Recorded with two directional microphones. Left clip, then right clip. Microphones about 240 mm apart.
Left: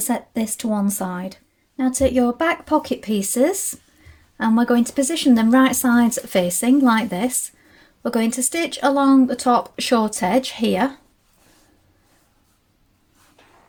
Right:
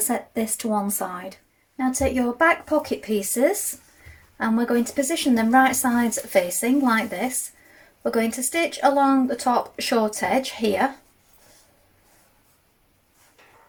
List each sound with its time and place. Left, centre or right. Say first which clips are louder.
0.1 s speech: left 3 dB; left